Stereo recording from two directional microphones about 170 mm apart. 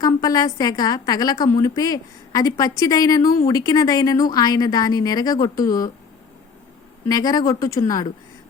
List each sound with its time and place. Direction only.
0.0 s a woman's voice: 25° left (ahead or behind)
7.1 s a woman's voice: 20° left (ahead or behind)